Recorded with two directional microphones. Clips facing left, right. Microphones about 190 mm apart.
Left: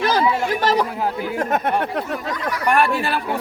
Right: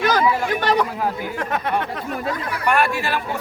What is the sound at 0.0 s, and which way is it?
Speech, 30° left (ahead or behind).